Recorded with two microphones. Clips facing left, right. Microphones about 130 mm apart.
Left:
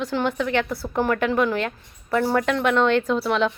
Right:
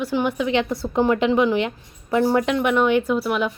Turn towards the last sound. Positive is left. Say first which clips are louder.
# even
turn(degrees=-10)  # may be behind; listen again after turning